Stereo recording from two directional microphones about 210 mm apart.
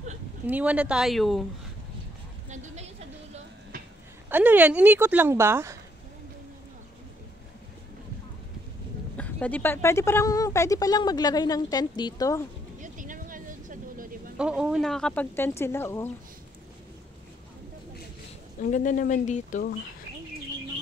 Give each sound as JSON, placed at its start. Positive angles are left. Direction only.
{"t": 0.5, "sound": "speech", "side_deg": -5}
{"t": 2.5, "sound": "a sound", "side_deg": -35}
{"t": 4.3, "sound": "speech", "side_deg": -10}
{"t": 9.1, "sound": "speech", "side_deg": 5}
{"t": 12.8, "sound": "vehicle", "side_deg": -40}
{"t": 14.3, "sound": "speech", "side_deg": -5}
{"t": 18.6, "sound": "speech", "side_deg": 40}